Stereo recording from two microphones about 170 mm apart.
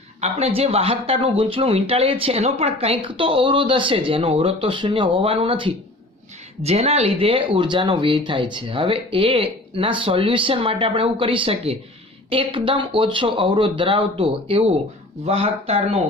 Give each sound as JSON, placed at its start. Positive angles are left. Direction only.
{"t": 0.2, "sound": "speech", "side_deg": -35}